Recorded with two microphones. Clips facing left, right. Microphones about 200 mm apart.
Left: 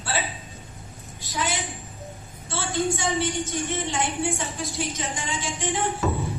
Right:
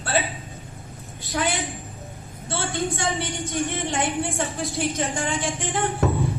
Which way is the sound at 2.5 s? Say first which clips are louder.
Left 1 dB; 50° right (ahead or behind).